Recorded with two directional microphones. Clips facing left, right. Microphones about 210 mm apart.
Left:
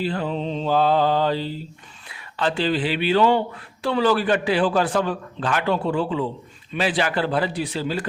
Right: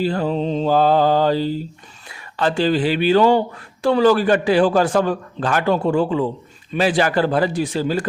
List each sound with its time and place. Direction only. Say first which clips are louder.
0.0 s a man's voice: right 5 dB; 40° right (ahead or behind)